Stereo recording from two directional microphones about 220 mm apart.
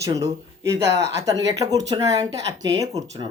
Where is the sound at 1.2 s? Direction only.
15° right (ahead or behind).